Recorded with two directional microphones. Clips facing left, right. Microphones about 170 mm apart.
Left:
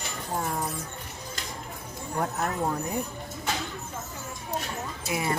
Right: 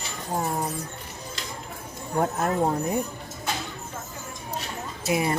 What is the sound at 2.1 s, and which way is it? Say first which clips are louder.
Speech: right 5 dB; 30° right (ahead or behind).